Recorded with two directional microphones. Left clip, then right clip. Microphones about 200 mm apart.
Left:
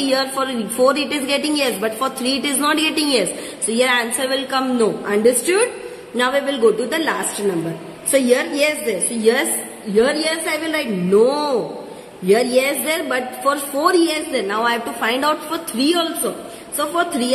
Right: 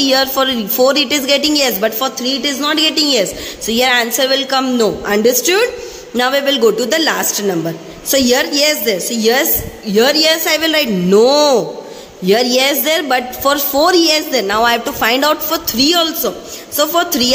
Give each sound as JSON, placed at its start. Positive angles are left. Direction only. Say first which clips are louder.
{"t": 0.0, "sound": "a woman's voice", "louder": "right 6 dB", "side_deg": -30}